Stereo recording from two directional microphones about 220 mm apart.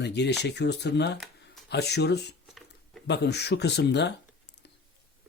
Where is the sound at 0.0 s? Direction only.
50° left (ahead or behind).